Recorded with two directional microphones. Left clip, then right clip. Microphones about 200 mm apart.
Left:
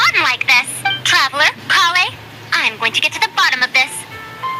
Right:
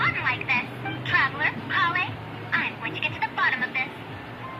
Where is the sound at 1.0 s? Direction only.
55° left (ahead or behind).